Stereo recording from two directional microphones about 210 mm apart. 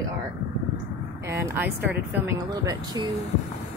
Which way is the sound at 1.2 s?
15° right (ahead or behind).